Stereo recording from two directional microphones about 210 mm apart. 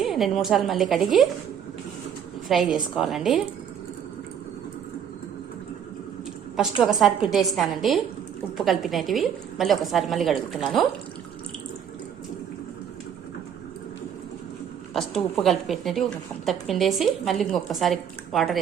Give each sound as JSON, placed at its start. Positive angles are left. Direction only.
{"t": 0.0, "sound": "a woman's voice", "side_deg": 0}
{"t": 2.5, "sound": "a woman's voice", "side_deg": 0}
{"t": 6.6, "sound": "a woman's voice", "side_deg": 0}
{"t": 14.9, "sound": "a woman's voice", "side_deg": 0}